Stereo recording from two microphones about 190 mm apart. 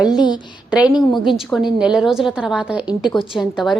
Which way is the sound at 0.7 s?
5° right (ahead or behind).